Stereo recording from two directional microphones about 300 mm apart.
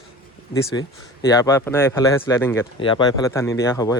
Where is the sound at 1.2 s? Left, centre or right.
Centre.